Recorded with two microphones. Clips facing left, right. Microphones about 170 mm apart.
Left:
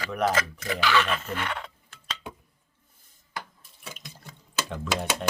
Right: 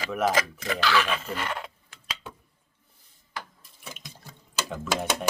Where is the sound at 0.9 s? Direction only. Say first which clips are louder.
Even; 5° right (ahead or behind).